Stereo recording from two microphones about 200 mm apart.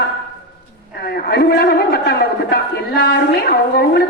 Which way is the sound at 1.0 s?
50° left (ahead or behind).